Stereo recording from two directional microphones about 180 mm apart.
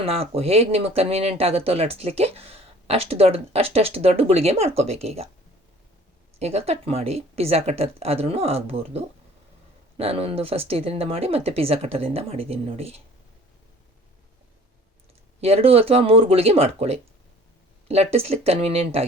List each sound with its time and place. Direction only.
0.0 s speech: 35° right (ahead or behind)
6.4 s speech: 35° right (ahead or behind)
15.4 s speech: 35° right (ahead or behind)